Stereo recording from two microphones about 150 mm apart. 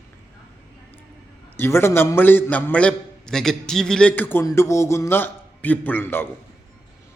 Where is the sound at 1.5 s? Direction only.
15° left (ahead or behind).